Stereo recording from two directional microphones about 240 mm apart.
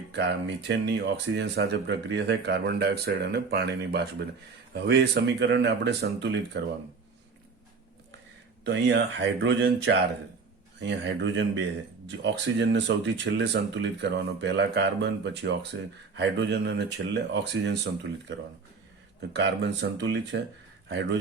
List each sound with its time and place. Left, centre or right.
0.1 s speech: right
8.6 s speech: right
15.7 s speech: right
16.1 s speech: right